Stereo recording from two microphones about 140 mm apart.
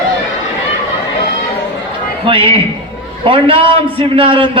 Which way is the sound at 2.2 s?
40° right (ahead or behind).